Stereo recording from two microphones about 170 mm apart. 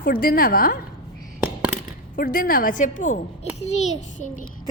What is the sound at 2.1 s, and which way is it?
A woman's voice, 55° left (ahead or behind).